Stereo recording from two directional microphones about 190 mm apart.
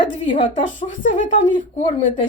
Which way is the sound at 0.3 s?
40° left (ahead or behind).